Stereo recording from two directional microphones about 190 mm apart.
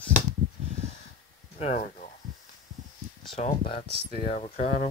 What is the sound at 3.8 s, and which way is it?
Speech, 30° right (ahead or behind).